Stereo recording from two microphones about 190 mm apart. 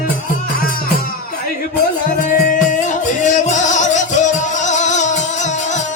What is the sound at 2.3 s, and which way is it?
Music, 45° left (ahead or behind).